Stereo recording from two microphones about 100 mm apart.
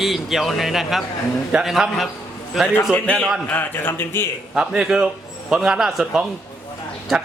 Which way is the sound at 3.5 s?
20° left (ahead or behind).